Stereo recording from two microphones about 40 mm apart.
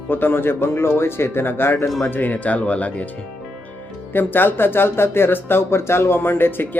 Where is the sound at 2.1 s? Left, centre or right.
Left.